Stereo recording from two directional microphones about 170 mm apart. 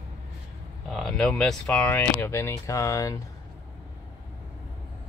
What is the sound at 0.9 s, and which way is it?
Speech, centre (ahead or behind).